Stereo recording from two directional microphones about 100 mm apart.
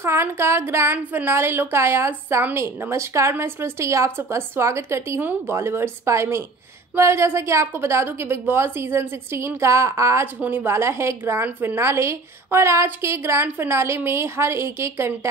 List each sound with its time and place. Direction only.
0.0 s a woman's voice: 25° right (ahead or behind)